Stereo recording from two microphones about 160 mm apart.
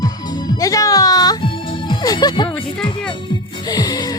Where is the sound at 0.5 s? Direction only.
20° left (ahead or behind).